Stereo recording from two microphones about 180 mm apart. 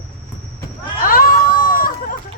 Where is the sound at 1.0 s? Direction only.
50° left (ahead or behind).